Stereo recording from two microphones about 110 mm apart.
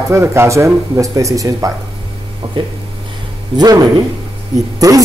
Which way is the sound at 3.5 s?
40° right (ahead or behind).